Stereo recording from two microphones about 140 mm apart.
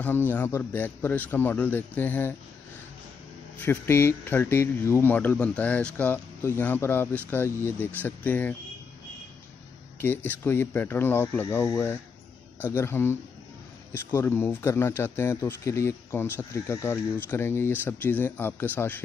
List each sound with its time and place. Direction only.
0.0 s a man's voice: 15° left (ahead or behind)
3.5 s a man's voice: 15° left (ahead or behind)
9.9 s a man's voice: 15° left (ahead or behind)